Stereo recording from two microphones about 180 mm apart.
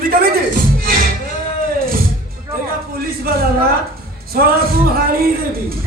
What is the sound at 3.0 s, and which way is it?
A man's voice, 55° right (ahead or behind).